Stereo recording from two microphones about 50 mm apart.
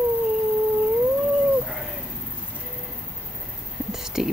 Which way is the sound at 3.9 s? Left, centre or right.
Centre.